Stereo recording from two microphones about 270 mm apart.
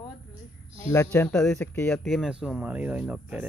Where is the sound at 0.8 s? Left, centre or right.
Centre.